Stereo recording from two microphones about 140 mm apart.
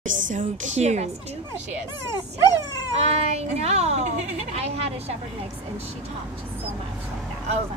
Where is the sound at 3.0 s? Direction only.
50° right (ahead or behind).